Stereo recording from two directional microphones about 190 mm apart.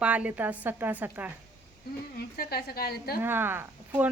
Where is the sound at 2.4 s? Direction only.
55° left (ahead or behind).